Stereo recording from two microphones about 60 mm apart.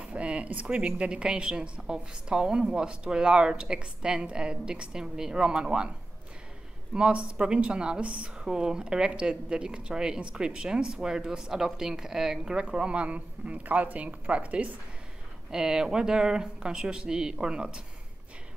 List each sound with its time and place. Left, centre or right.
0.0 s speech: centre
6.9 s speech: centre